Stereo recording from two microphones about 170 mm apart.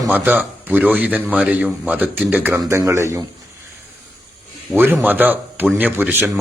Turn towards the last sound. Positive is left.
turn(degrees=-10)  # may be behind; listen again after turning